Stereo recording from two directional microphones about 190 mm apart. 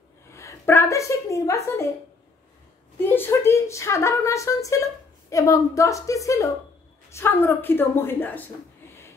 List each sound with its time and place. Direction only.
0.3 s a woman's voice: 15° left (ahead or behind)
3.0 s a woman's voice: 10° left (ahead or behind)